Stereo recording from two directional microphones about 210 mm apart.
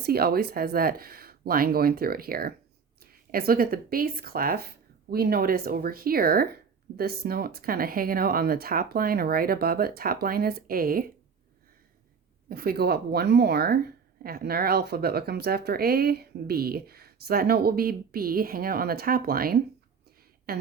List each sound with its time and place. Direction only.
0.0 s speech: 45° right (ahead or behind)
12.5 s speech: 45° right (ahead or behind)
20.5 s a sound: 45° right (ahead or behind)